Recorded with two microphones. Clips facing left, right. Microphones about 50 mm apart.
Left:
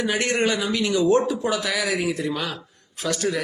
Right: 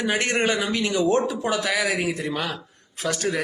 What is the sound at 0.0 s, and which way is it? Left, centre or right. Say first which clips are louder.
A man's voice: even; right.